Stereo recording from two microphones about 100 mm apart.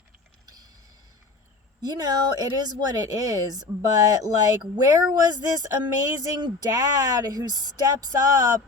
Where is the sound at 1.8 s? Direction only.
40° right (ahead or behind).